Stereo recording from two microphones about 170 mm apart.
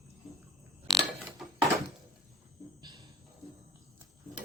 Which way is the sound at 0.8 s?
Centre (ahead or behind).